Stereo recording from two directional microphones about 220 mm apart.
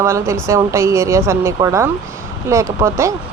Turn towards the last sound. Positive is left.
turn(degrees=-10)  # may be behind; listen again after turning